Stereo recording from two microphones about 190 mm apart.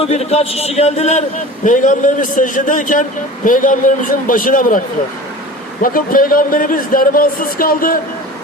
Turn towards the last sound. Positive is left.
turn(degrees=50)  # may be behind; listen again after turning